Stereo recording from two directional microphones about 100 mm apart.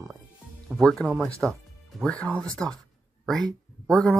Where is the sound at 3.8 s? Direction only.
5° left (ahead or behind).